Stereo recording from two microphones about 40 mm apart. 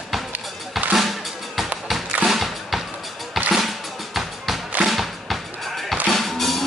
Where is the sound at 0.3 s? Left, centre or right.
Right.